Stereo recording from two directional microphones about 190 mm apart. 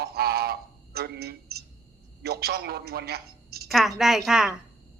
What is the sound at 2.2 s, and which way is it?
A woman's voice, 55° right (ahead or behind).